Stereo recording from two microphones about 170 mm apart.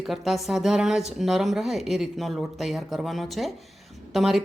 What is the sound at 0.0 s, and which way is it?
Speech, centre (ahead or behind).